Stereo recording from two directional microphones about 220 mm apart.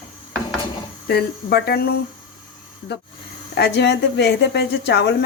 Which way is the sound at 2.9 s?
50° left (ahead or behind).